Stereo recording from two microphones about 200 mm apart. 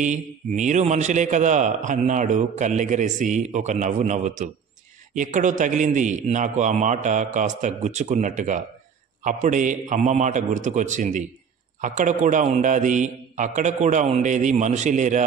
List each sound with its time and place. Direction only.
0.0 s a man's voice: 35° right (ahead or behind)